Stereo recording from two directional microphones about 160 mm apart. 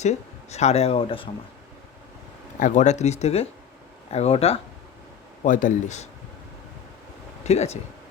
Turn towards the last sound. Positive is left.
turn(degrees=40)  # may be behind; listen again after turning